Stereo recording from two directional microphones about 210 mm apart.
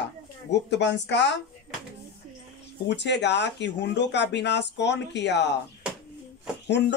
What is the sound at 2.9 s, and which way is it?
Speech, 55° left (ahead or behind).